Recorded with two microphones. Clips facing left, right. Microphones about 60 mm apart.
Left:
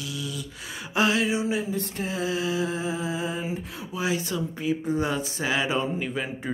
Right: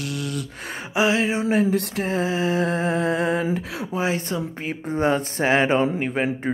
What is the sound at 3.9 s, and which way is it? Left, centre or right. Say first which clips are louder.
Speech: right 3 dB; right.